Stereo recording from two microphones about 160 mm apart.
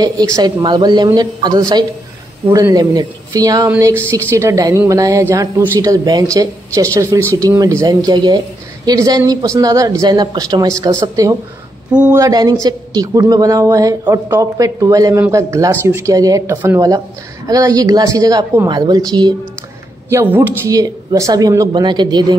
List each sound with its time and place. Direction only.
0.0 s a woman's voice: 25° right (ahead or behind)
11.9 s speech: 10° right (ahead or behind)
12.2 s a woman's voice: 25° right (ahead or behind)
20.1 s a woman's voice: 15° right (ahead or behind)